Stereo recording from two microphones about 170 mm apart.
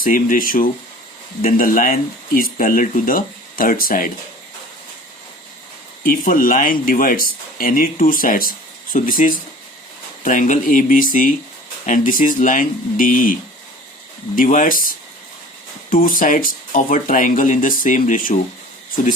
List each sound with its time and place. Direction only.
0.0 s speech: 55° left (ahead or behind)
6.0 s speech: 55° left (ahead or behind)
14.3 s speech: 50° left (ahead or behind)